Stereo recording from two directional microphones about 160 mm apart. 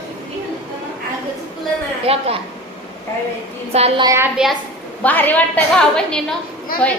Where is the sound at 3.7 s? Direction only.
40° right (ahead or behind).